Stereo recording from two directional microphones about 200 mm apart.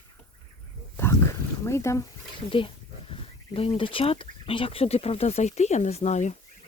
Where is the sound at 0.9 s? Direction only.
10° left (ahead or behind).